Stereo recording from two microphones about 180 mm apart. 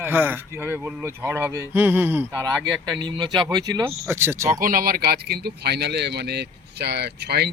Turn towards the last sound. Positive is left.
turn(degrees=-65)  # may be behind; listen again after turning